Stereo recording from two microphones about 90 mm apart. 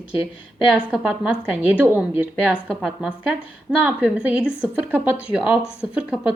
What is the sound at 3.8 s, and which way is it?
A woman's voice, 15° right (ahead or behind).